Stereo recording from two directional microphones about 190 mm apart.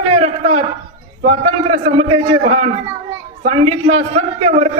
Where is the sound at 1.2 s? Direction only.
35° right (ahead or behind).